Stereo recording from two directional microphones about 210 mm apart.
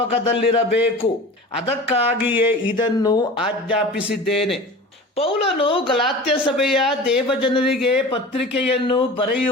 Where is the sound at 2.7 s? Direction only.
20° left (ahead or behind).